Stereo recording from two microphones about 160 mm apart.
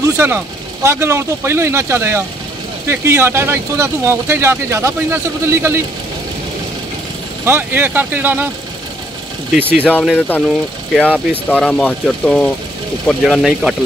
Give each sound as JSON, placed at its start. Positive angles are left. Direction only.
{"t": 0.0, "sound": "speech", "side_deg": -15}
{"t": 7.4, "sound": "speech", "side_deg": -15}
{"t": 9.5, "sound": "speech", "side_deg": -10}
{"t": 10.1, "sound": "speech", "side_deg": 10}
{"t": 10.4, "sound": "speech", "side_deg": 0}